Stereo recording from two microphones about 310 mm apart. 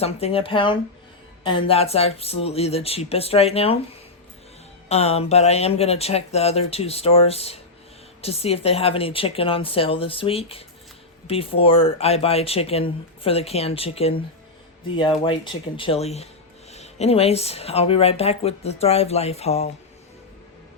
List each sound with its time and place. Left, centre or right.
0.0 s a woman's voice: centre
4.9 s a woman's voice: left
15.2 s a woman's voice: centre